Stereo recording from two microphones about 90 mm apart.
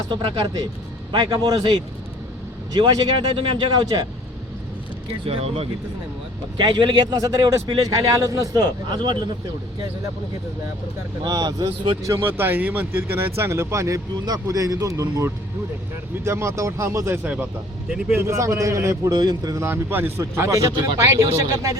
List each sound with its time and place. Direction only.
0.1 s speech: 60° right (ahead or behind)
1.1 s a man's voice: 65° right (ahead or behind)
1.5 s a man's voice: 50° right (ahead or behind)
2.7 s speech: 60° right (ahead or behind)
5.2 s speech: 90° right
6.6 s speech: 55° right (ahead or behind)
7.1 s a man's voice: 40° right (ahead or behind)
11.2 s a man's voice: 45° right (ahead or behind)
12.0 s speech: 35° right (ahead or behind)
12.3 s speech: 20° right (ahead or behind)
17.2 s speech: 15° right (ahead or behind)
18.1 s speech: 30° right (ahead or behind)
19.1 s a man's voice: 50° right (ahead or behind)
19.6 s speech: 25° right (ahead or behind)